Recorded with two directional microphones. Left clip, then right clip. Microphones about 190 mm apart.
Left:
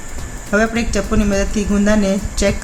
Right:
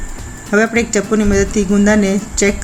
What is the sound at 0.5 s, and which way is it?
Speech, 20° right (ahead or behind).